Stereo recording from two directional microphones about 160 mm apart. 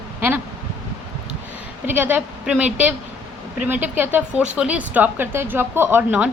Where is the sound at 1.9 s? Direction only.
10° right (ahead or behind).